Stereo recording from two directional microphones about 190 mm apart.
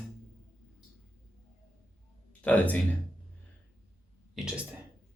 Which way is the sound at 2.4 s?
10° left (ahead or behind).